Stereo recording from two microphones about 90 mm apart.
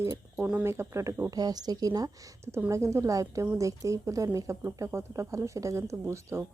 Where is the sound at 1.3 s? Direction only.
45° right (ahead or behind).